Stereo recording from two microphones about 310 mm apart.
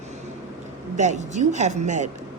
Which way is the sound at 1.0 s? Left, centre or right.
Right.